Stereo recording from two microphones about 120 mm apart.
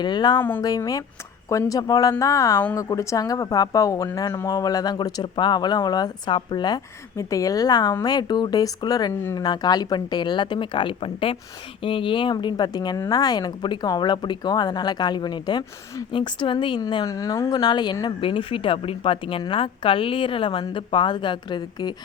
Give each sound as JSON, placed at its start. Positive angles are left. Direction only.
{"t": 0.0, "sound": "a woman's voice", "side_deg": 40}
{"t": 17.5, "sound": "speech", "side_deg": 40}